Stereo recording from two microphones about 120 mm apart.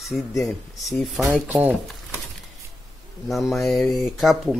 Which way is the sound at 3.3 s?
Centre (ahead or behind).